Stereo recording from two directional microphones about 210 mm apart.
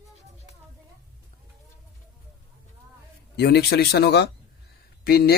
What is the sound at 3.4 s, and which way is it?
Speech, 50° left (ahead or behind).